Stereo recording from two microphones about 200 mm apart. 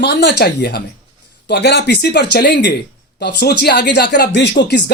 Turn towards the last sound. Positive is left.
turn(degrees=55)  # may be behind; listen again after turning